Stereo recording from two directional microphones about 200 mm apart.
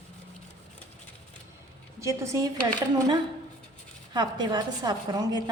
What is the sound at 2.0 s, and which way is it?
Speech, 15° right (ahead or behind).